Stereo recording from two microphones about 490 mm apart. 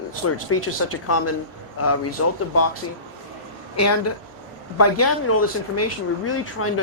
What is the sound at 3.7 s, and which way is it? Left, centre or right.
Speech, left.